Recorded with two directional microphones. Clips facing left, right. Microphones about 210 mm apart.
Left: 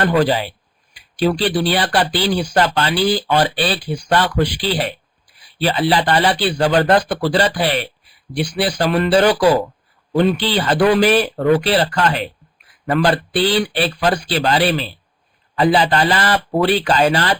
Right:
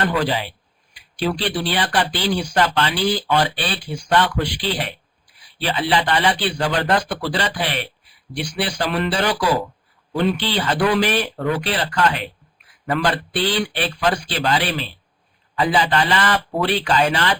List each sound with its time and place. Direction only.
0.2 s speech: 40° left (ahead or behind)